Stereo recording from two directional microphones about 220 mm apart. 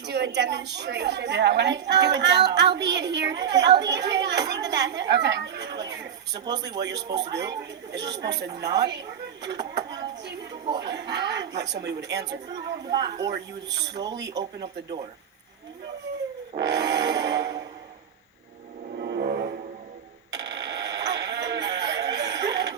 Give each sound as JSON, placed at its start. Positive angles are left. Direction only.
{"t": 0.0, "sound": "a woman's voice", "side_deg": -50}
{"t": 5.9, "sound": "a sound", "side_deg": -50}
{"t": 7.1, "sound": "a woman's voice", "side_deg": -20}
{"t": 7.9, "sound": "a woman's voice", "side_deg": -50}
{"t": 10.0, "sound": "a sound", "side_deg": -50}
{"t": 10.8, "sound": "a woman's voice", "side_deg": -50}
{"t": 12.5, "sound": "a woman's voice", "side_deg": -15}
{"t": 12.9, "sound": "a woman's voice", "side_deg": -50}
{"t": 16.6, "sound": "music", "side_deg": -50}
{"t": 18.9, "sound": "music", "side_deg": -45}
{"t": 20.3, "sound": "a sound", "side_deg": -50}